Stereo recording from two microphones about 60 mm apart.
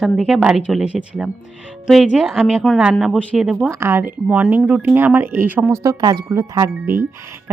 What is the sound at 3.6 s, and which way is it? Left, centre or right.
Speech, right.